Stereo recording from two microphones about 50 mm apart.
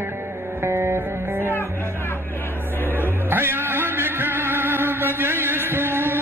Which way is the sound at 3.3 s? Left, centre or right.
Right.